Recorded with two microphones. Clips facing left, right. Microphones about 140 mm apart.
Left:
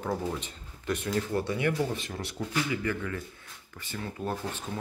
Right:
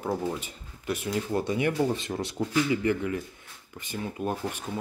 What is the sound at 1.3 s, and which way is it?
Speech, 20° right (ahead or behind).